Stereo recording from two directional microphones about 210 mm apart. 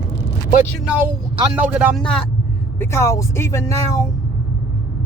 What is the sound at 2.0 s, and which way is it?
Speech, 5° left (ahead or behind).